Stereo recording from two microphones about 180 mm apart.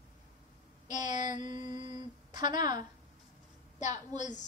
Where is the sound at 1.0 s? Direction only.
45° left (ahead or behind).